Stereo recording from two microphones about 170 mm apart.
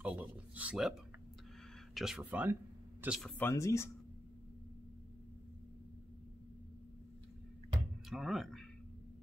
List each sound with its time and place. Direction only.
0.0 s speech: 10° right (ahead or behind)
2.0 s speech: 5° right (ahead or behind)
3.3 s speech: 15° left (ahead or behind)
8.1 s speech: centre (ahead or behind)